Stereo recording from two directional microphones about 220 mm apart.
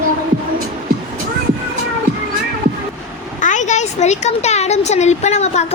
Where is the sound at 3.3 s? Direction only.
35° left (ahead or behind).